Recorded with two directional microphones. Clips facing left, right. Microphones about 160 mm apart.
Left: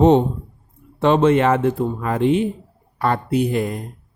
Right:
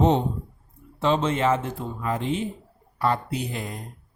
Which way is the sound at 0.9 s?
60° left (ahead or behind).